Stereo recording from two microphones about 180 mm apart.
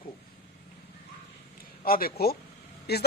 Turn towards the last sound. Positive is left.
turn(degrees=65)  # may be behind; listen again after turning